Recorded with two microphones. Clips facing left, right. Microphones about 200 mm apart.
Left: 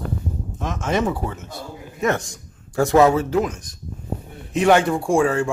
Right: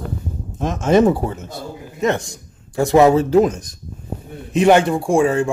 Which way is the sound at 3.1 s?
30° right (ahead or behind).